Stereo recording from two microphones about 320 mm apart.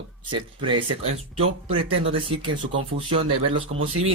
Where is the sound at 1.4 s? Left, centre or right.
Centre.